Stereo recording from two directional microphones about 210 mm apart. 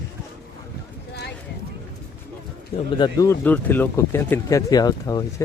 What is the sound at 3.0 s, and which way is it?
Speech, 20° left (ahead or behind).